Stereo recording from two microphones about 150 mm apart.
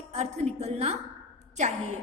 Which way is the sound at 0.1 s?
45° right (ahead or behind).